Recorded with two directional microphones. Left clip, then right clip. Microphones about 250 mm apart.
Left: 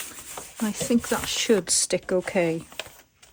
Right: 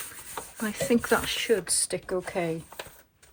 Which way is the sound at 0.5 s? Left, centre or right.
Centre.